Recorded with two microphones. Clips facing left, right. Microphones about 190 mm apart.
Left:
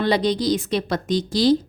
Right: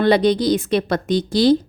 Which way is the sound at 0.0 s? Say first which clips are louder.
Right 5 dB; 60° right (ahead or behind).